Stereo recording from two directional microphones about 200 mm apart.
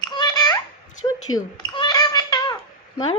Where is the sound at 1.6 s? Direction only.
20° left (ahead or behind).